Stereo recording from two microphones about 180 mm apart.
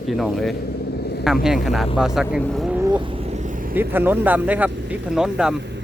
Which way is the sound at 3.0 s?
30° right (ahead or behind).